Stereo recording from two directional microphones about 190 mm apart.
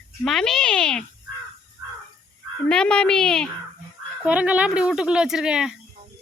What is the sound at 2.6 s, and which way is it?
Speech, 5° left (ahead or behind).